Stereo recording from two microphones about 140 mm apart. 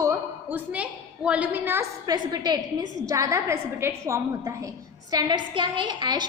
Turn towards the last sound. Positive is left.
turn(degrees=-30)  # may be behind; listen again after turning